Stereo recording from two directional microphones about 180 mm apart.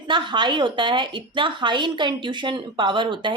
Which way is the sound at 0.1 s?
25° right (ahead or behind).